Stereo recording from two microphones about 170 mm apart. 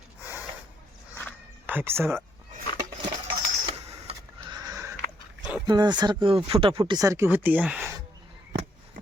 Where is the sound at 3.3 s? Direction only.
30° right (ahead or behind).